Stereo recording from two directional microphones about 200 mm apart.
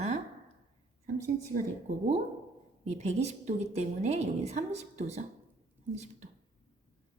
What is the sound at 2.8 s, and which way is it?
Speech, 35° right (ahead or behind).